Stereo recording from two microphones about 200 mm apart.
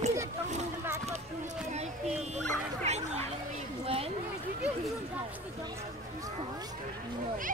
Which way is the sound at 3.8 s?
30° right (ahead or behind).